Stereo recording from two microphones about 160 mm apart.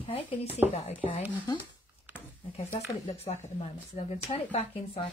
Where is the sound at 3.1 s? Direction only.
40° left (ahead or behind).